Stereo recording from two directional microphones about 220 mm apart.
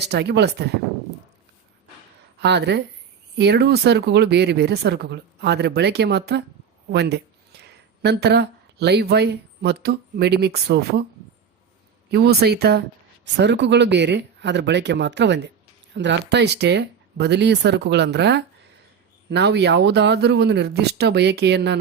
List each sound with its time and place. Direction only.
0.0 s speech: 50° right (ahead or behind)
2.4 s speech: 50° right (ahead or behind)
12.1 s speech: 45° right (ahead or behind)